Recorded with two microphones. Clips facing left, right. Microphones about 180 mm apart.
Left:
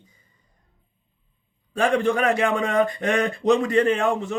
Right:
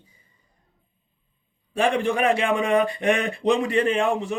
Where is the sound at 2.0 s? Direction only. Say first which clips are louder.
Left 1 dB; 15° right (ahead or behind).